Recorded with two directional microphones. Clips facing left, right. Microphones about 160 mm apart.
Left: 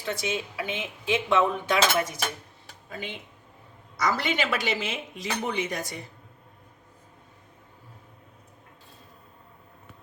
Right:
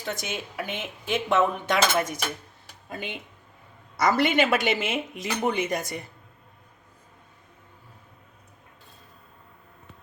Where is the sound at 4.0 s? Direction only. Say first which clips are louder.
Right 5 dB; 55° right (ahead or behind).